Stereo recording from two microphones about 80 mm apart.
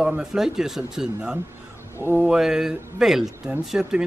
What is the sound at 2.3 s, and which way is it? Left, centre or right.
Speech, centre.